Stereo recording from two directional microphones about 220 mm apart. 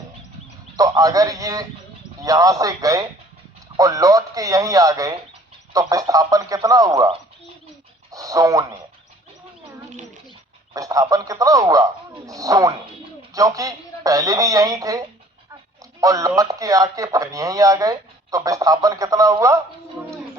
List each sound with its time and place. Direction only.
0.8 s speech: 15° right (ahead or behind)
8.1 s a sound: 15° right (ahead or behind)
10.8 s speech: 15° right (ahead or behind)